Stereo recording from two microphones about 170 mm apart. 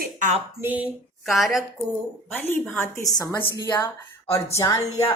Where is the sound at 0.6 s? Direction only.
10° right (ahead or behind).